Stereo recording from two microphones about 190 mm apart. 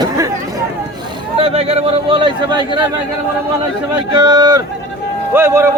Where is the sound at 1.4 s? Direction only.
30° right (ahead or behind).